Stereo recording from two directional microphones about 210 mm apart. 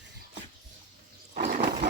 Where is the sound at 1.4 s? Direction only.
45° right (ahead or behind).